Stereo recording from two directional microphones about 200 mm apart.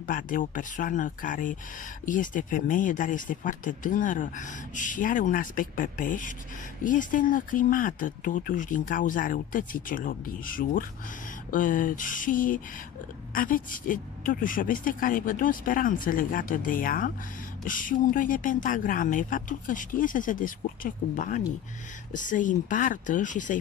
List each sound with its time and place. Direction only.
0.0 s speech: 45° left (ahead or behind)